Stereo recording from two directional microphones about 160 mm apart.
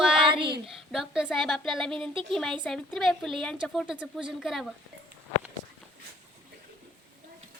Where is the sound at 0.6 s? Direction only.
Centre (ahead or behind).